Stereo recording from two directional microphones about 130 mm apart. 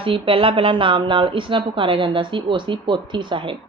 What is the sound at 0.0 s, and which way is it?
A woman's voice, 45° right (ahead or behind).